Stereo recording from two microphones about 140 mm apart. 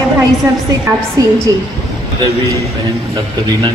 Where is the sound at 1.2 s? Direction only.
25° right (ahead or behind).